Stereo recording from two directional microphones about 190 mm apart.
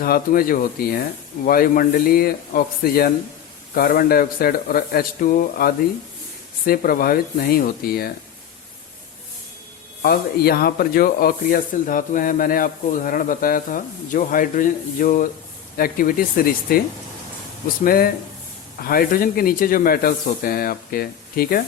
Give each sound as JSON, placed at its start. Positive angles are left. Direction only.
{"t": 0.0, "sound": "speech", "side_deg": 50}
{"t": 10.0, "sound": "speech", "side_deg": 55}
{"t": 17.8, "sound": "speech", "side_deg": 50}